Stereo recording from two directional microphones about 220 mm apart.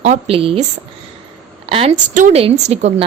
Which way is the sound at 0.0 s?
30° right (ahead or behind).